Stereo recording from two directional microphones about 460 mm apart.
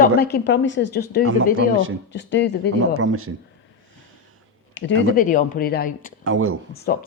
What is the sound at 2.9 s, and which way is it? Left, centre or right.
Speech, right.